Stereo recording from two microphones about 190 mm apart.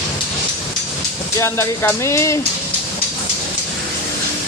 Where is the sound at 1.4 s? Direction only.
15° left (ahead or behind).